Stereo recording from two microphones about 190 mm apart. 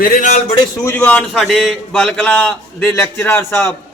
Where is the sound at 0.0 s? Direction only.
45° left (ahead or behind).